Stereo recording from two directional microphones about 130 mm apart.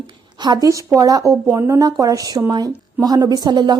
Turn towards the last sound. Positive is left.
turn(degrees=-35)  # may be behind; listen again after turning